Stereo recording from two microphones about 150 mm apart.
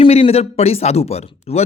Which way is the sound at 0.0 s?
40° left (ahead or behind).